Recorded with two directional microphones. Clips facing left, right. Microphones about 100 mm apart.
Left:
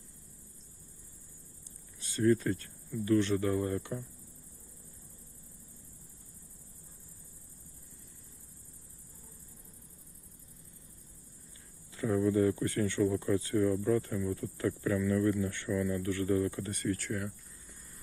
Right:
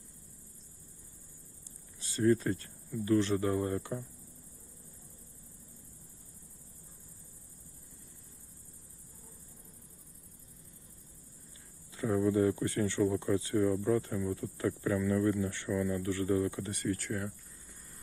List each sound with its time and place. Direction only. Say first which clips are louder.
2.0 s speech: even; 25° right (ahead or behind)
11.9 s speech: even; 20° right (ahead or behind)